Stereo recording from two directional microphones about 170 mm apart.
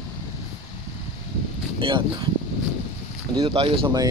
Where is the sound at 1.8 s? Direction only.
30° right (ahead or behind).